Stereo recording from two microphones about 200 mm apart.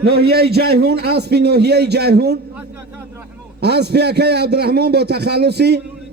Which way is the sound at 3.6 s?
55° right (ahead or behind).